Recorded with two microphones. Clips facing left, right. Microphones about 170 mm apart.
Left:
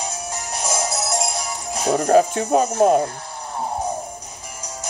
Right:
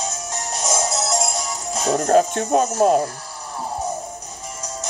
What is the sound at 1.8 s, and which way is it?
Speech, 10° left (ahead or behind).